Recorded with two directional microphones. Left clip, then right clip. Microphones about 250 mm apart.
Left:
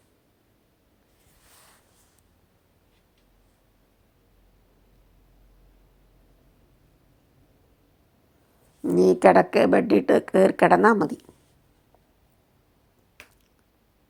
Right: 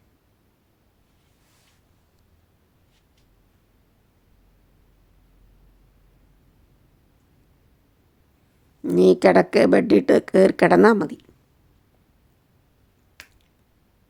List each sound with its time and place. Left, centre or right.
8.8 s speech: centre
13.2 s finger snapping: right